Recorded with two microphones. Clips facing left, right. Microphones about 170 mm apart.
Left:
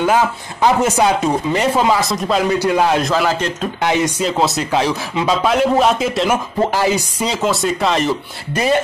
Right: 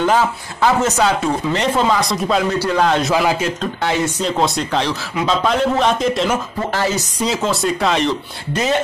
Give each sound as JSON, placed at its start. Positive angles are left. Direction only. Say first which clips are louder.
{"t": 0.0, "sound": "speech", "louder": "left 1 dB", "side_deg": 15}
{"t": 3.0, "sound": "a man's voice", "louder": "even", "side_deg": 0}
{"t": 3.8, "sound": "speech", "louder": "left 2 dB", "side_deg": 15}
{"t": 4.2, "sound": "speech", "louder": "left 1 dB", "side_deg": 5}
{"t": 7.2, "sound": "speech", "louder": "left 1 dB", "side_deg": 0}